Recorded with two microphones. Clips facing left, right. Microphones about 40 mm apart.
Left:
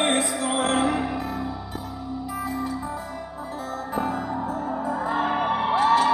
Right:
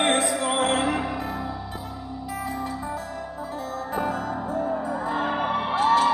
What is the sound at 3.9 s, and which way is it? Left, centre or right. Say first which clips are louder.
Music: even; centre.